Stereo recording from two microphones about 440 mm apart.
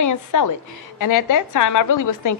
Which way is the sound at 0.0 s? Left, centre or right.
Left.